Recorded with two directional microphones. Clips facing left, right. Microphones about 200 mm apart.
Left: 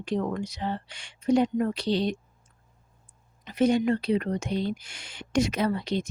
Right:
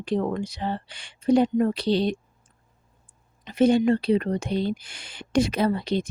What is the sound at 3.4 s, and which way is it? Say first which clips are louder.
A woman's voice: right 4 dB; 30° right (ahead or behind).